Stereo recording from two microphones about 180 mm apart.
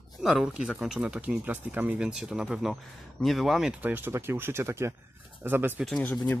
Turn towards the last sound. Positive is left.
turn(degrees=5)  # may be behind; listen again after turning